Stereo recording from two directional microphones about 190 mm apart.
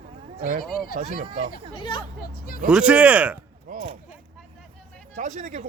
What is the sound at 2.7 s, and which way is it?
Speech, 5° right (ahead or behind).